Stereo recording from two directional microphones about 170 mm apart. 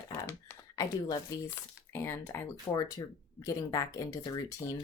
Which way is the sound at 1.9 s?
15° left (ahead or behind).